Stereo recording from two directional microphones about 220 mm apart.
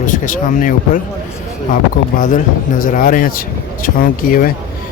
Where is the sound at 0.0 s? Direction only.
35° left (ahead or behind).